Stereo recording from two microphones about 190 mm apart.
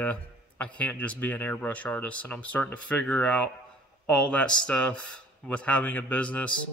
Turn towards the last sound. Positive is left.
turn(degrees=5)  # may be behind; listen again after turning